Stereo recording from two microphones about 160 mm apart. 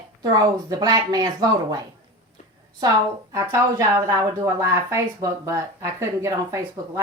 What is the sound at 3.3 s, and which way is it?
Speech, 20° right (ahead or behind).